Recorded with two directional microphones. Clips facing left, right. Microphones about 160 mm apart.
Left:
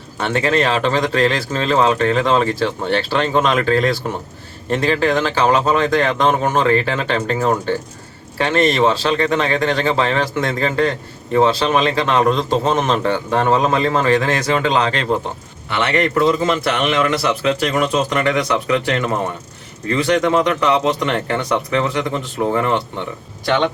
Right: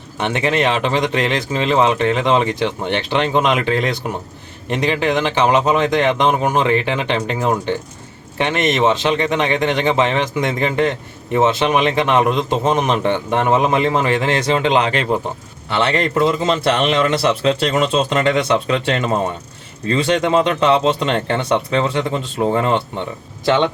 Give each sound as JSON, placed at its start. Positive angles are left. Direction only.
{"t": 0.2, "sound": "a man's voice", "side_deg": -15}
{"t": 15.7, "sound": "a man's voice", "side_deg": -30}